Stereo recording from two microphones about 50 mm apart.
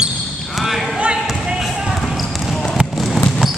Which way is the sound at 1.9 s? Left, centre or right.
Centre.